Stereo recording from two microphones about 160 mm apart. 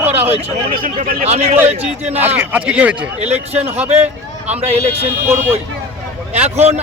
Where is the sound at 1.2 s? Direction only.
45° right (ahead or behind).